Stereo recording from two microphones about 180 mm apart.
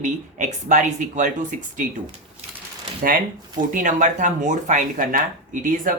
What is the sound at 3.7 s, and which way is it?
Speech, 45° right (ahead or behind).